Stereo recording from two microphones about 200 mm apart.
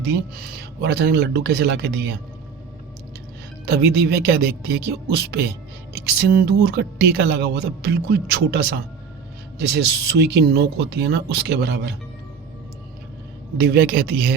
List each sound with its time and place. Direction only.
0.3 s speech: 50° right (ahead or behind)
3.7 s speech: 55° right (ahead or behind)
13.6 s speech: 50° right (ahead or behind)